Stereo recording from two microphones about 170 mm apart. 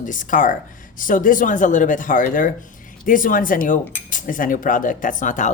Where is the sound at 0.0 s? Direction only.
50° left (ahead or behind).